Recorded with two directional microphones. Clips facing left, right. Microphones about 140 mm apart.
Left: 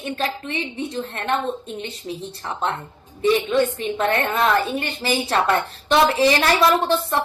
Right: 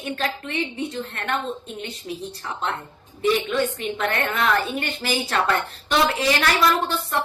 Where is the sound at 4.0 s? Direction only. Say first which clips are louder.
Left 4 dB; 25° left (ahead or behind).